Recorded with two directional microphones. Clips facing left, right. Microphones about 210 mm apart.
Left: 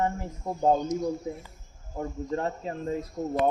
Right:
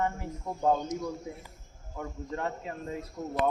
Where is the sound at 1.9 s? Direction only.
30° left (ahead or behind).